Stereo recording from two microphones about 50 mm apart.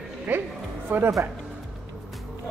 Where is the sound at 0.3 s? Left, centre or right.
Right.